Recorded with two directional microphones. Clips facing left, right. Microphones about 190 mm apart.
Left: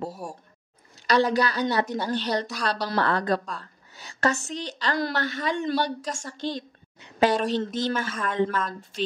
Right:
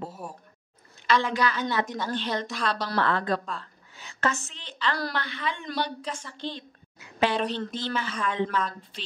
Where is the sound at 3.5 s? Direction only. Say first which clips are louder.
Even; 40° left (ahead or behind).